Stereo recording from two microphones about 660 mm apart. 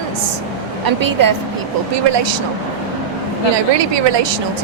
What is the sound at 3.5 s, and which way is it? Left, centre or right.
Speech, right.